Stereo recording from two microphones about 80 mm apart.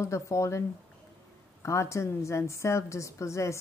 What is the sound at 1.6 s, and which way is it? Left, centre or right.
A woman's voice, left.